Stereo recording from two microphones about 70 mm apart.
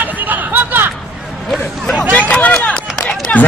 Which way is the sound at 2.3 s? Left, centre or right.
Centre.